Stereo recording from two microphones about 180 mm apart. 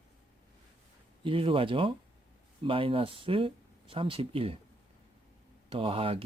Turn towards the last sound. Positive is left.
turn(degrees=-30)  # may be behind; listen again after turning